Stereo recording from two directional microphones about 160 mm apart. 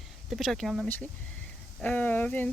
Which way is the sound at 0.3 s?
Centre (ahead or behind).